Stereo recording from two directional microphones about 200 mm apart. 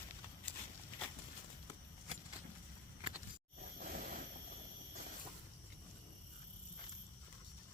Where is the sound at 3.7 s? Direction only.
45° right (ahead or behind).